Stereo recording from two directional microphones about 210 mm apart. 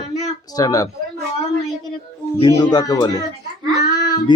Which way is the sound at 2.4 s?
20° left (ahead or behind).